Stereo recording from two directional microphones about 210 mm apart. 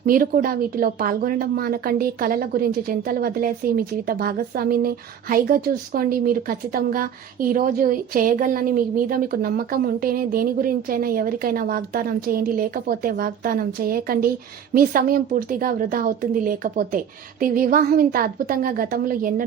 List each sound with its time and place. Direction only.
0.0 s speech: 40° right (ahead or behind)